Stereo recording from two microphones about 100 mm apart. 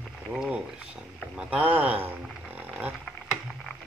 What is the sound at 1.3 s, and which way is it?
Speech, 10° right (ahead or behind).